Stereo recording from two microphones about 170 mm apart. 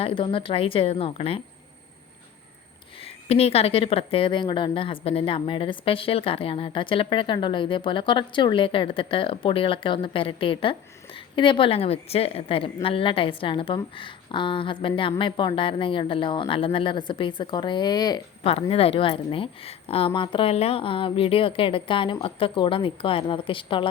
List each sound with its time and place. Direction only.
0.0 s a woman's voice: 30° left (ahead or behind)
3.2 s a woman's voice: 35° left (ahead or behind)
18.7 s a woman's voice: 35° left (ahead or behind)